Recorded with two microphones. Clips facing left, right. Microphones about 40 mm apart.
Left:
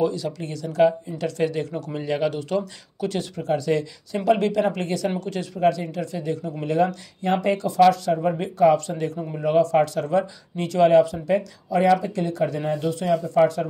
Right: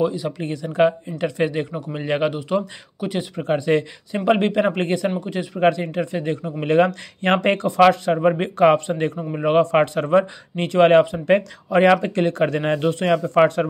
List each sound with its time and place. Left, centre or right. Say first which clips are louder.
0.0 s speech: right 2 dB; right
2.0 s speech: right 3 dB; right
2.3 s speech: right 3 dB; right
3.4 s speech: right 3 dB; right
5.2 s speech: right 2 dB; centre
5.6 s speech: right 3 dB; right
8.7 s speech: right 3 dB; right